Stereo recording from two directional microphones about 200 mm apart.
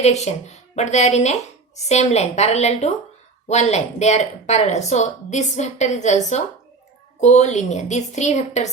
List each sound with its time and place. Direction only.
0.0 s a woman's voice: 35° left (ahead or behind)